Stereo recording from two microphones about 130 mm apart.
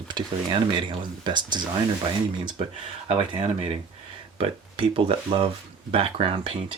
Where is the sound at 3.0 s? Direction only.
45° right (ahead or behind).